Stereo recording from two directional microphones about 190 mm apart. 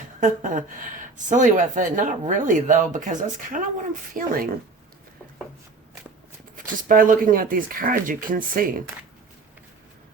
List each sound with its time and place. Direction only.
0.2 s speech: 45° right (ahead or behind)
6.8 s speech: 45° right (ahead or behind)